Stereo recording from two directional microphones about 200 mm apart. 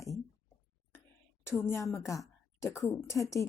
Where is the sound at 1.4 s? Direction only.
10° left (ahead or behind).